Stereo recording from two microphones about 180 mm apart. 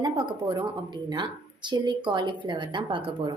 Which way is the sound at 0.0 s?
25° right (ahead or behind).